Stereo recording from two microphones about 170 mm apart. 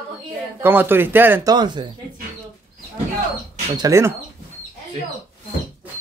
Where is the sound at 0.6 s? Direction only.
10° right (ahead or behind).